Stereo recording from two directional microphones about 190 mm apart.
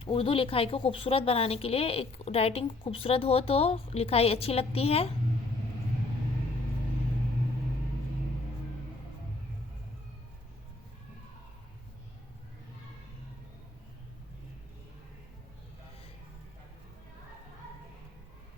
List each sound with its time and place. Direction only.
0.0 s speech: 30° left (ahead or behind)